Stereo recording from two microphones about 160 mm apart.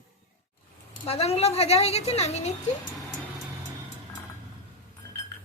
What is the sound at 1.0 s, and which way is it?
A woman's voice, 40° left (ahead or behind).